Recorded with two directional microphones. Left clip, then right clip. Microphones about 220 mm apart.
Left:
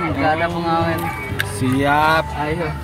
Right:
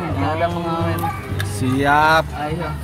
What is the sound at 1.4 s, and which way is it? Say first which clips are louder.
Speech: left 2 dB; centre (ahead or behind).